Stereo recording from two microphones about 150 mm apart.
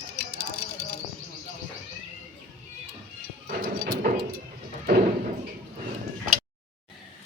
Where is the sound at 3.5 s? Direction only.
75° right (ahead or behind).